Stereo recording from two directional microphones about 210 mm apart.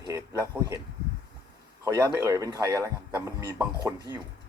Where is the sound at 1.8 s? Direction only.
15° right (ahead or behind).